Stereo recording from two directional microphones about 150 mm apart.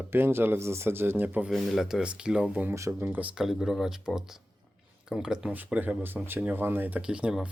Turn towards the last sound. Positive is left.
turn(degrees=-5)  # may be behind; listen again after turning